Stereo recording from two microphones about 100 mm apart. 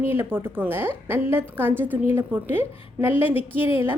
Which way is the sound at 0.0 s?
20° right (ahead or behind).